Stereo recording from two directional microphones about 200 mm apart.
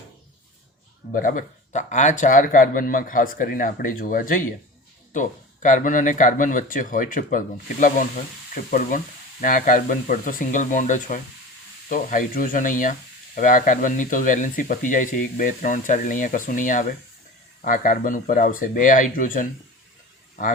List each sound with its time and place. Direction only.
1.1 s speech: 40° left (ahead or behind)